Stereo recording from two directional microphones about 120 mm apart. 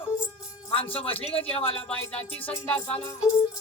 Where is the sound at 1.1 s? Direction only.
55° left (ahead or behind).